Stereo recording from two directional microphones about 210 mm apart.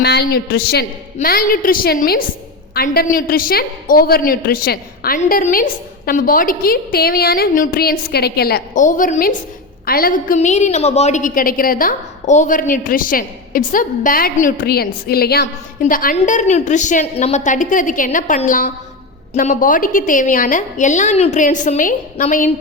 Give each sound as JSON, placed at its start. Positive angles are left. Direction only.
{"t": 0.0, "sound": "a woman's voice", "side_deg": 50}